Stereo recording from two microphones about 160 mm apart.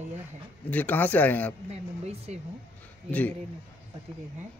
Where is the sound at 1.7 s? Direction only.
40° right (ahead or behind).